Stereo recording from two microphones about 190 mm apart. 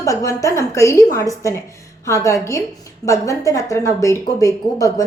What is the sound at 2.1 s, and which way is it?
A woman's voice, 15° left (ahead or behind).